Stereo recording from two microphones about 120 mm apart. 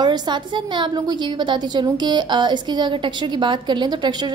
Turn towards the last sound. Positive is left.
turn(degrees=-35)  # may be behind; listen again after turning